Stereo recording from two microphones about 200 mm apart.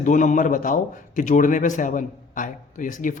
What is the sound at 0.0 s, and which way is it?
A man's voice, 40° left (ahead or behind).